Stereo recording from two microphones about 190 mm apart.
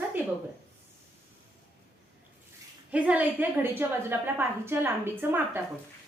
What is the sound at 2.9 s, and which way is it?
A woman's voice, 5° right (ahead or behind).